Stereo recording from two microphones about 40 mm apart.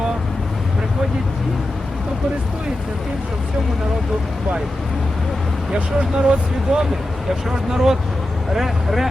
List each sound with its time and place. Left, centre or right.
5.7 s speech: right; by 9.0 s centre